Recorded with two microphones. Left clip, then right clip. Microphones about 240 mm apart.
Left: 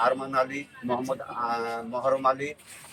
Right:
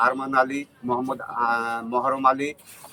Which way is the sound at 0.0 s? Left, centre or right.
Right.